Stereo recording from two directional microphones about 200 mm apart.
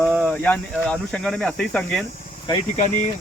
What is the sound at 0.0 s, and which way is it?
Speech, 5° left (ahead or behind).